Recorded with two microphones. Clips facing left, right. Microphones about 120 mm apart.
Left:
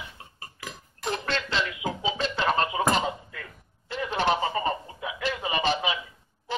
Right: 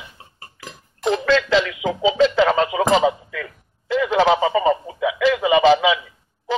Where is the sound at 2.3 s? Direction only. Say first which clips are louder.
Right 8 dB; 90° right.